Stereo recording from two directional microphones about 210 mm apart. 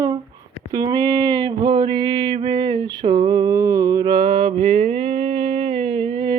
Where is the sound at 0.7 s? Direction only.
20° right (ahead or behind).